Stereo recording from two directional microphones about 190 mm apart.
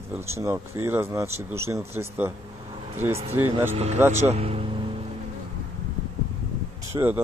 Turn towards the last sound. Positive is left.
turn(degrees=-10)  # may be behind; listen again after turning